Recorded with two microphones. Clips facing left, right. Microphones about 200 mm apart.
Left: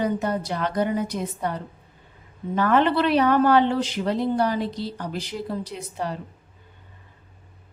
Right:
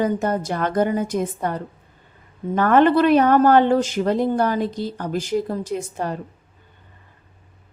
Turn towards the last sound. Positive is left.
turn(degrees=-50)  # may be behind; listen again after turning